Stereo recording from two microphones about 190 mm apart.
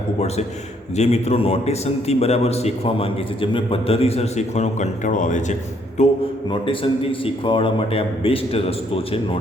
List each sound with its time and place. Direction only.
0.9 s a man's voice: 35° left (ahead or behind)